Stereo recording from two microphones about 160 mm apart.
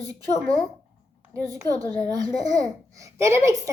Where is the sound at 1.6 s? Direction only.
25° right (ahead or behind).